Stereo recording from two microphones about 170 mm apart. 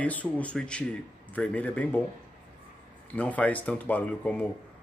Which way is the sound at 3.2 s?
10° left (ahead or behind).